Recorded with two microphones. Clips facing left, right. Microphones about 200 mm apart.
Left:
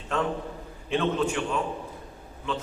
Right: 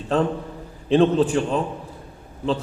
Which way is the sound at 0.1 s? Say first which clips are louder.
Right 6 dB; 35° right (ahead or behind).